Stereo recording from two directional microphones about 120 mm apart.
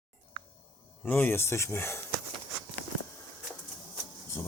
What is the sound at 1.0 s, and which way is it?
Speech, 15° left (ahead or behind).